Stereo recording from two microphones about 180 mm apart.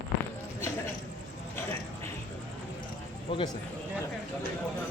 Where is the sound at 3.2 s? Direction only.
30° left (ahead or behind).